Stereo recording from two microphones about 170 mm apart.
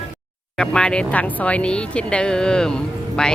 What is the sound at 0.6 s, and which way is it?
Speech, 5° left (ahead or behind).